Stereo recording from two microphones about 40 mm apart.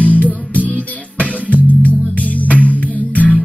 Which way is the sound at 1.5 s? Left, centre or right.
Left.